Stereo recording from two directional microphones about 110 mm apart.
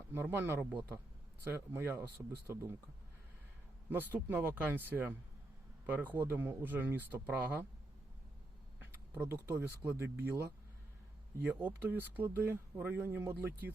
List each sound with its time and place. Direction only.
0.1 s speech: 20° right (ahead or behind)
3.8 s speech: 15° right (ahead or behind)
8.8 s speech: 20° right (ahead or behind)